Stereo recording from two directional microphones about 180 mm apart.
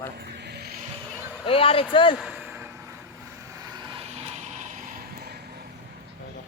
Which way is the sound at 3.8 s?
30° right (ahead or behind).